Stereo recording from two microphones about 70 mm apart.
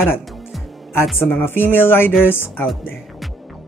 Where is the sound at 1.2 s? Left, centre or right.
Left.